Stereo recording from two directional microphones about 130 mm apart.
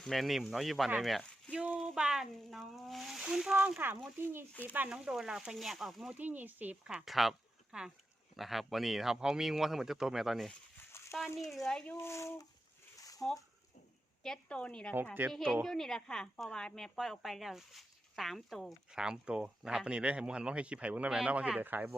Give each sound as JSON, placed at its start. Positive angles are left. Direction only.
{"t": 0.0, "sound": "a woman's voice", "side_deg": 0}
{"t": 3.8, "sound": "a woman's voice", "side_deg": -15}
{"t": 6.1, "sound": "a woman's voice", "side_deg": -15}
{"t": 10.9, "sound": "a sound", "side_deg": 20}
{"t": 11.3, "sound": "a woman's voice", "side_deg": 0}
{"t": 11.9, "sound": "speech", "side_deg": 20}
{"t": 13.0, "sound": "a sound", "side_deg": 25}
{"t": 14.3, "sound": "a woman's voice", "side_deg": 10}